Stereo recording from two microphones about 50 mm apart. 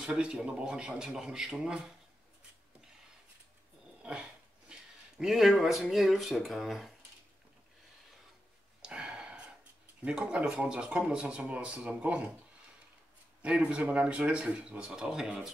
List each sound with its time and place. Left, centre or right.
0.0 s a man's voice: right
4.0 s a sound: centre
5.2 s speech: centre
8.8 s a sound: centre
10.0 s a man's voice: centre
13.4 s speech: right